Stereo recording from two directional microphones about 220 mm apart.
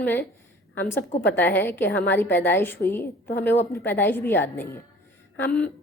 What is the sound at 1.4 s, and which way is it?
A woman's voice, 10° left (ahead or behind).